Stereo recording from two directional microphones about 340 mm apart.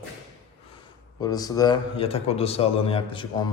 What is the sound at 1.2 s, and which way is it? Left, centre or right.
Speech, centre.